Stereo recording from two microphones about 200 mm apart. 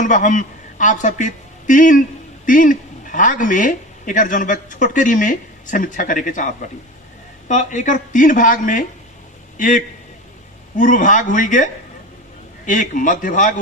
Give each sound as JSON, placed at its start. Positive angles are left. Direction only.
{"t": 0.0, "sound": "a man's voice", "side_deg": 40}